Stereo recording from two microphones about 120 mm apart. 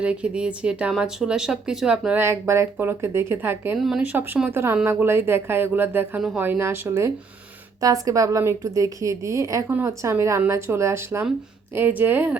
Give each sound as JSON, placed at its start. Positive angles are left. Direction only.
{"t": 0.0, "sound": "speech", "side_deg": -10}
{"t": 2.2, "sound": "speech", "side_deg": -20}
{"t": 3.8, "sound": "speech", "side_deg": -5}